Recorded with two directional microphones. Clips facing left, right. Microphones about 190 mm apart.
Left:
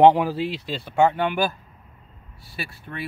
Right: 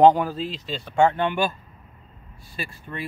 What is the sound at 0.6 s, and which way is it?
Speech, 5° left (ahead or behind).